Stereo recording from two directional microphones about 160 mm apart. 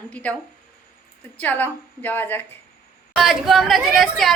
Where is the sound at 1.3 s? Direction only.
10° left (ahead or behind).